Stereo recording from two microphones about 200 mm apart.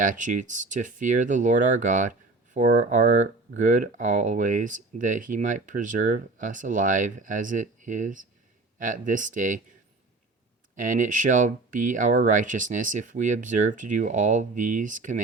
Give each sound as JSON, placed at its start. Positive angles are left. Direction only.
{"t": 0.0, "sound": "speech", "side_deg": -40}
{"t": 10.8, "sound": "speech", "side_deg": -40}